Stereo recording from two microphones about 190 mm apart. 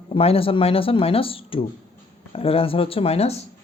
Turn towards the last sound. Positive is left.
turn(degrees=35)  # may be behind; listen again after turning